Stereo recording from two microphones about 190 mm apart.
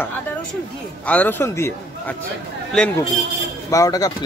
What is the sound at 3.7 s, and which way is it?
Speech, 20° left (ahead or behind).